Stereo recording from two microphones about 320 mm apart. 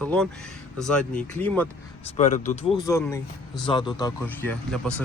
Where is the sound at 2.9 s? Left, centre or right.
Centre.